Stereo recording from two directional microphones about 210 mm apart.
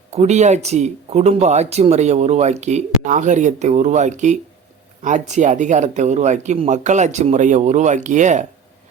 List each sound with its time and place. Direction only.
0.1 s speech: 35° right (ahead or behind)